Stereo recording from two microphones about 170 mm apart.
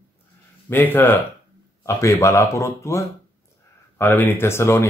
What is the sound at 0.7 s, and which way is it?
Speech, 10° left (ahead or behind).